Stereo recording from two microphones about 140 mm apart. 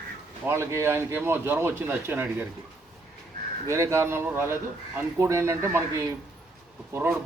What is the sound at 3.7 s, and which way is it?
Speech, 20° right (ahead or behind).